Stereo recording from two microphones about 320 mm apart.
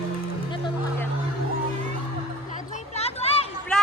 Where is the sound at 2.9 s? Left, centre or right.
Centre.